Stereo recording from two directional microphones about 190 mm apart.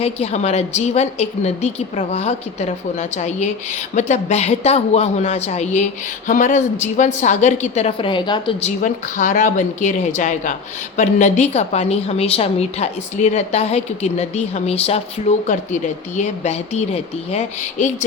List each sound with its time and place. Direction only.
0.0 s a woman's voice: 35° left (ahead or behind)
8.8 s a woman's voice: 45° left (ahead or behind)